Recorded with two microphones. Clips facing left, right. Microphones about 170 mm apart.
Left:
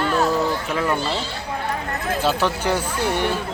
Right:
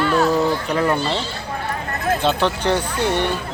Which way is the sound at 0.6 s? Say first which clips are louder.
Right 3 dB; centre (ahead or behind).